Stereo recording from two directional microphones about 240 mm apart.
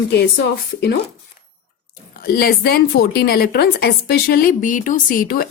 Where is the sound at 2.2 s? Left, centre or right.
Left.